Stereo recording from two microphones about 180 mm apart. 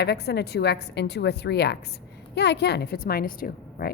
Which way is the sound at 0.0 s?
65° left (ahead or behind).